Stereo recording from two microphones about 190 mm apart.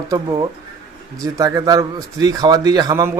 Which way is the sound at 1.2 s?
20° right (ahead or behind).